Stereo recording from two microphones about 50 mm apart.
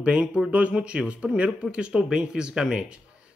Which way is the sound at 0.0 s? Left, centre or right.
Centre.